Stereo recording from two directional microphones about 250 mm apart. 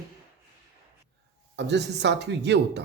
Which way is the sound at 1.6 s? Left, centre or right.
Right.